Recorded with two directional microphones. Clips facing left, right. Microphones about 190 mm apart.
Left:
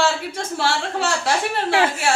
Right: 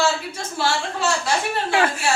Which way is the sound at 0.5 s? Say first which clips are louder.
Left 1 dB; 70° left (ahead or behind).